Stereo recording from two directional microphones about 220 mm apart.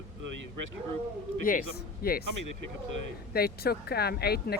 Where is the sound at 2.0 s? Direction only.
40° left (ahead or behind).